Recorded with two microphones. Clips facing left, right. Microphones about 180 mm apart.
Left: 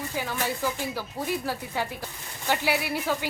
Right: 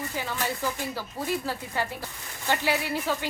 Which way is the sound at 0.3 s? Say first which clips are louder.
Left 1 dB; 10° left (ahead or behind).